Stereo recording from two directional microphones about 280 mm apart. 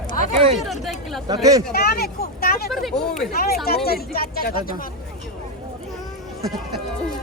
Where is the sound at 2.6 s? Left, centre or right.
Centre.